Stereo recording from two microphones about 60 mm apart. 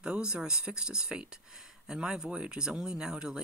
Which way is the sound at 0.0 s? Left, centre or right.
Centre.